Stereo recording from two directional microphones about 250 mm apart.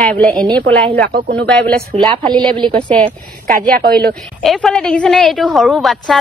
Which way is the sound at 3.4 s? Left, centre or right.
Right.